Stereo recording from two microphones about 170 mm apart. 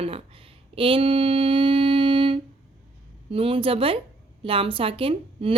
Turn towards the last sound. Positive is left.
turn(degrees=-35)  # may be behind; listen again after turning